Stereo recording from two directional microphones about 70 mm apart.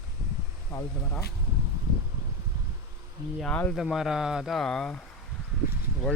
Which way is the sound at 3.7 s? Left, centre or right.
Centre.